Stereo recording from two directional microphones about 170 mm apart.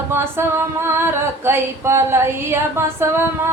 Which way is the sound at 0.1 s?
15° right (ahead or behind).